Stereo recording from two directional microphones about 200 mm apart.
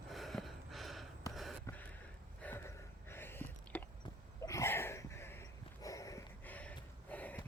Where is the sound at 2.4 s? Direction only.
10° left (ahead or behind).